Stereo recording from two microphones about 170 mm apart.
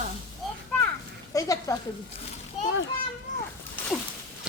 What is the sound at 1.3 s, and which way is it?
Speech, 20° left (ahead or behind).